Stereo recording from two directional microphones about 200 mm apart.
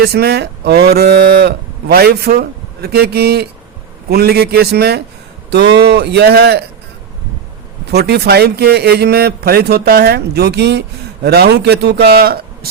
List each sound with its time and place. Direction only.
0.0 s a man's voice: 55° right (ahead or behind)
7.9 s a man's voice: 55° right (ahead or behind)